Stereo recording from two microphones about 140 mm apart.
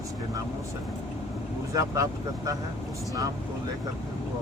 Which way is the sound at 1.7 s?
25° right (ahead or behind).